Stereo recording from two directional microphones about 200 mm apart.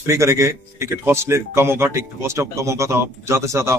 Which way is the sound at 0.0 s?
15° right (ahead or behind).